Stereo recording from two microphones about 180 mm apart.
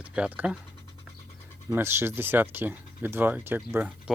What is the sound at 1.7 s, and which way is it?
Speech, 15° right (ahead or behind).